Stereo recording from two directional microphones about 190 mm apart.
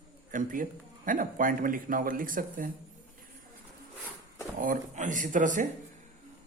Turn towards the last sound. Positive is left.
turn(degrees=-45)  # may be behind; listen again after turning